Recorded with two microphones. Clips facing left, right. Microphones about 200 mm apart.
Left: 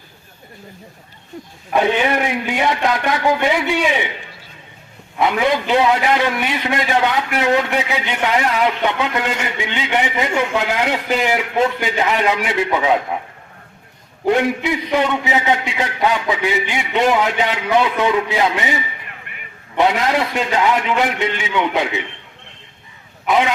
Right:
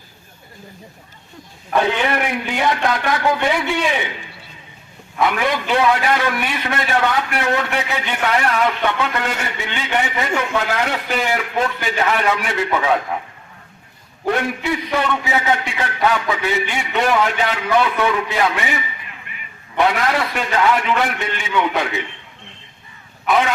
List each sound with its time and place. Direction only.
1.7 s a man's voice: 15° left (ahead or behind)
5.1 s a man's voice: 20° left (ahead or behind)
14.3 s a man's voice: 20° left (ahead or behind)
19.8 s a man's voice: 20° left (ahead or behind)
23.2 s speech: 15° left (ahead or behind)